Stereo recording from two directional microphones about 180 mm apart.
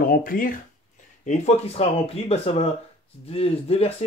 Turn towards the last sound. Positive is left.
turn(degrees=35)  # may be behind; listen again after turning